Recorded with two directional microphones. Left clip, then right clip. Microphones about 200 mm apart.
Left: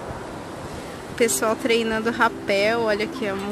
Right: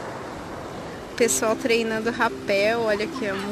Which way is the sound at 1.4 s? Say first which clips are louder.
Left 1 dB; 5° left (ahead or behind).